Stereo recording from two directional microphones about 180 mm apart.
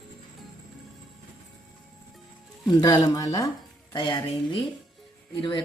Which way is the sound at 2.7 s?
20° left (ahead or behind).